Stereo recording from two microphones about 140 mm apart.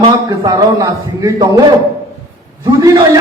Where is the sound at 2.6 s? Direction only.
20° right (ahead or behind).